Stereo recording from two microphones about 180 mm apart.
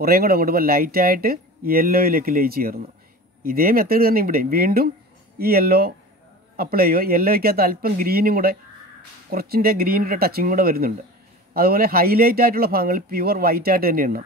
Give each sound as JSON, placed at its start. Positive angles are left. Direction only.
{"t": 0.0, "sound": "speech", "side_deg": -55}